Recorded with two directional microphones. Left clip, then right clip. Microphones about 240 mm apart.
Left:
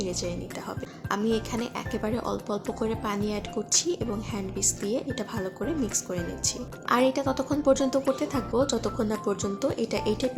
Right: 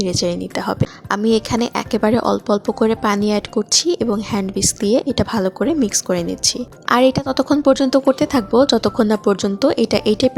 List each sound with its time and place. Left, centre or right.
0.0 s speech: right